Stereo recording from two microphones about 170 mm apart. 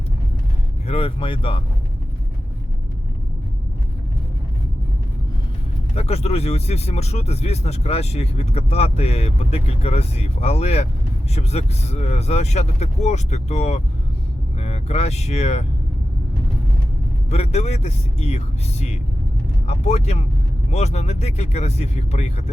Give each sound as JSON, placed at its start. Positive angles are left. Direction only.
{"t": 0.9, "sound": "speech", "side_deg": 35}
{"t": 5.9, "sound": "speech", "side_deg": 40}
{"t": 17.2, "sound": "speech", "side_deg": 40}